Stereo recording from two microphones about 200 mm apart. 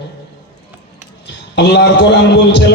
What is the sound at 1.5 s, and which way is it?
Speech, 55° left (ahead or behind).